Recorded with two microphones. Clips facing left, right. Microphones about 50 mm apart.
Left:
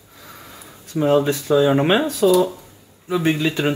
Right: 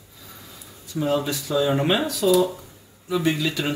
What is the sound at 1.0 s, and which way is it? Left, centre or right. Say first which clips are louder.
Speech: left 6 dB; left.